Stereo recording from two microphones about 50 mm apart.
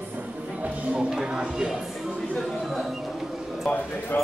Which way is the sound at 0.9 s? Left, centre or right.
Centre.